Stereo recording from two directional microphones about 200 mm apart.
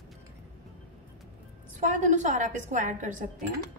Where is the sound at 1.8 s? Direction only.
40° right (ahead or behind).